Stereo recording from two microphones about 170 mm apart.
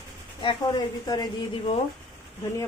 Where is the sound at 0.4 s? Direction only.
25° left (ahead or behind).